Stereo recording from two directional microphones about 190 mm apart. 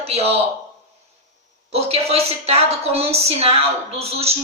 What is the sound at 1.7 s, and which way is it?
A woman's voice, 30° right (ahead or behind).